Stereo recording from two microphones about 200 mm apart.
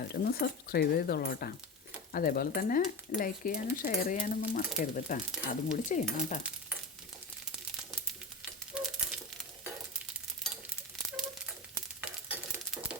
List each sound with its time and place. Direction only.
0.1 s speech: 55° left (ahead or behind)
5.3 s speech: 5° right (ahead or behind)
5.9 s speech: 40° left (ahead or behind)
8.4 s a sound: 5° right (ahead or behind)
11.9 s sizzle: 5° right (ahead or behind)